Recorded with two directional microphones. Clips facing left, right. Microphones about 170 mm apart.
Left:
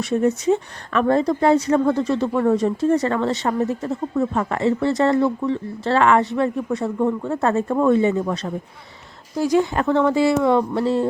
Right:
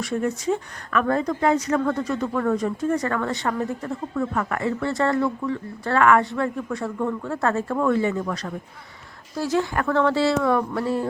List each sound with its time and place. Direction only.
0.0 s speech: 25° left (ahead or behind)